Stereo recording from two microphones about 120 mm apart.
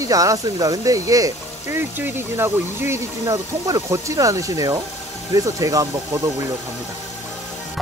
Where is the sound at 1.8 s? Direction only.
15° right (ahead or behind).